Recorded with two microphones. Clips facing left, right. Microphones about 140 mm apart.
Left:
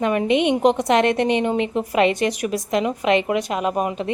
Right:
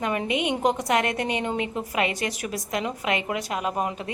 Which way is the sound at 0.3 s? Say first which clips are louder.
Left 8 dB; 25° left (ahead or behind).